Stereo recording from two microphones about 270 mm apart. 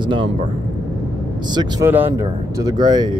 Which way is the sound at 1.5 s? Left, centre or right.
Centre.